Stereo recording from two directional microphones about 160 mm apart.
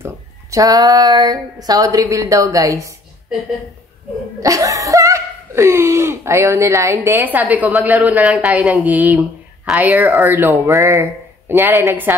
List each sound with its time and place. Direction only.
0.0 s speech: 20° right (ahead or behind)
4.4 s speech: 20° right (ahead or behind)